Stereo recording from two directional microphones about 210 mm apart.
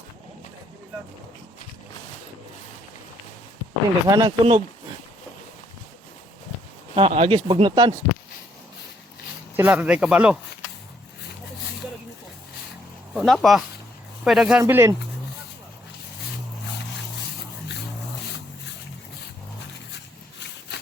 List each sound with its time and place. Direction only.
4.0 s speech: 20° right (ahead or behind)
6.9 s speech: 25° right (ahead or behind)
9.6 s speech: 5° right (ahead or behind)
13.1 s speech: centre (ahead or behind)
14.6 s speech: 15° right (ahead or behind)